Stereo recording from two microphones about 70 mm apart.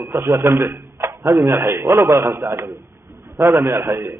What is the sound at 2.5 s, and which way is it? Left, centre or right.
Speech, right.